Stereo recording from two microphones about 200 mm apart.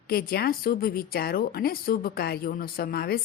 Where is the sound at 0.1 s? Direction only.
50° left (ahead or behind).